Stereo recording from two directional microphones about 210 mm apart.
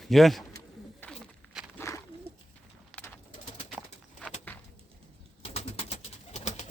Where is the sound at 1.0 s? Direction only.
10° left (ahead or behind).